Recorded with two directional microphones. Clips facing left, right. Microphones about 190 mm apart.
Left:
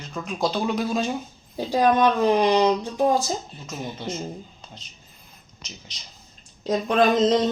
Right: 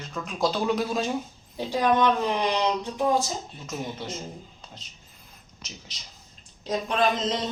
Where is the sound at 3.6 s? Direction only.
Centre (ahead or behind).